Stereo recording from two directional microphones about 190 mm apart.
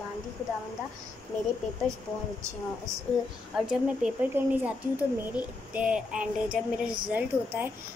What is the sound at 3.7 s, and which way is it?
Child singing, 5° right (ahead or behind).